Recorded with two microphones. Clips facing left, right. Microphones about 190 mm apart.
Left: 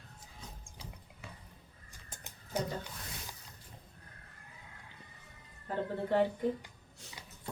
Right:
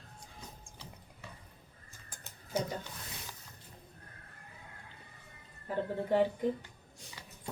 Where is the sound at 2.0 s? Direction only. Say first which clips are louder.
Left 1 dB; 20° left (ahead or behind).